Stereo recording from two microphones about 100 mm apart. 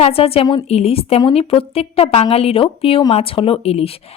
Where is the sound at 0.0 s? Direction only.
75° left (ahead or behind).